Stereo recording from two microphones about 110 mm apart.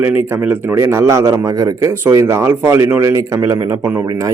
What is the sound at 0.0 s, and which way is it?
A man's voice, 20° right (ahead or behind).